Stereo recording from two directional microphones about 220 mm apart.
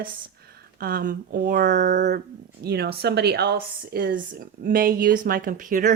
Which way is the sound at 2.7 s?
45° right (ahead or behind).